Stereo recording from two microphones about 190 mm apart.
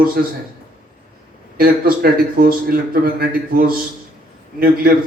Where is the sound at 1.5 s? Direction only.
50° right (ahead or behind).